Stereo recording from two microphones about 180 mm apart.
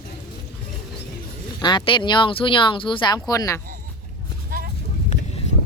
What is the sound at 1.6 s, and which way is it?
Speech, 25° left (ahead or behind).